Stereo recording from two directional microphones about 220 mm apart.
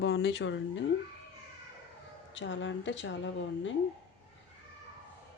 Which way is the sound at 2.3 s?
55° left (ahead or behind).